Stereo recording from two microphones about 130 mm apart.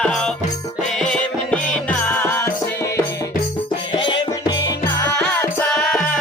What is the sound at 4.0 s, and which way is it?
Music, 40° left (ahead or behind).